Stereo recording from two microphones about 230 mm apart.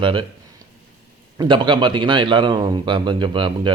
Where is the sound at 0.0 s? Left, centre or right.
Right.